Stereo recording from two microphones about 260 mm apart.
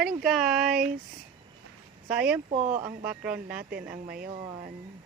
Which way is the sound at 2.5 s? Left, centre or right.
Right.